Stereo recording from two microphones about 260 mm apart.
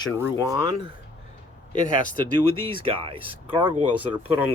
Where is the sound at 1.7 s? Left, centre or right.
Left.